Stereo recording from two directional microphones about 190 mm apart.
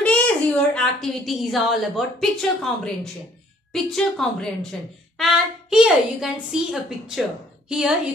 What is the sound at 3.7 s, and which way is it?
A woman's voice, centre (ahead or behind).